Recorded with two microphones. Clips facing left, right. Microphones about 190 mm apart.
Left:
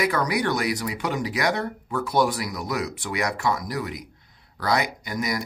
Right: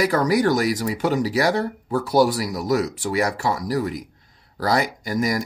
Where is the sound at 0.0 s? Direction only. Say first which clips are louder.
Right 5 dB; 40° right (ahead or behind).